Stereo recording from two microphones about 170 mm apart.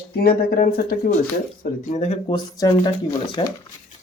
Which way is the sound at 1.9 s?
40° left (ahead or behind).